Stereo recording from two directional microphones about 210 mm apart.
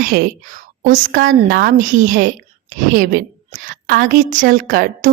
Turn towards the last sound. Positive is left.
turn(degrees=-40)  # may be behind; listen again after turning